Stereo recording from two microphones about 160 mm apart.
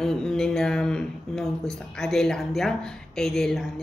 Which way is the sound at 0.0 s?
5° left (ahead or behind).